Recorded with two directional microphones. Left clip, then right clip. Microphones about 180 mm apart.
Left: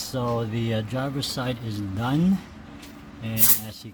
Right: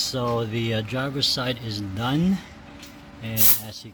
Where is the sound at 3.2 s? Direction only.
Centre (ahead or behind).